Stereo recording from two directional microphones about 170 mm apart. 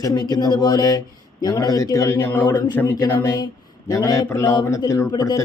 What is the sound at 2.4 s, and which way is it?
Mantra, 25° left (ahead or behind).